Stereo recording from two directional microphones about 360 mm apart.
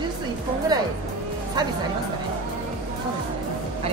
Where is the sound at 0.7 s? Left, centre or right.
Centre.